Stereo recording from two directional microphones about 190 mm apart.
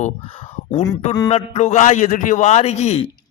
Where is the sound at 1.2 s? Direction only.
35° left (ahead or behind).